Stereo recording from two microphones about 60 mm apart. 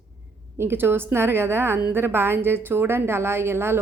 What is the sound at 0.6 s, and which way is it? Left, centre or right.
A woman's voice, right.